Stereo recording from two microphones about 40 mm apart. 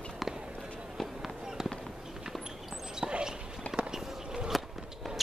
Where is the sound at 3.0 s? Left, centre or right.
Centre.